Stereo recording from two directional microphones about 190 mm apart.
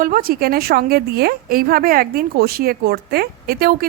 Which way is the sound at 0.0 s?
50° right (ahead or behind).